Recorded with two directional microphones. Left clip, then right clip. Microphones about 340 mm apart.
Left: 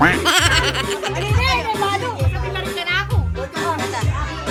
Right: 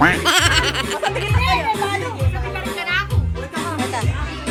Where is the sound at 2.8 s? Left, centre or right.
Left.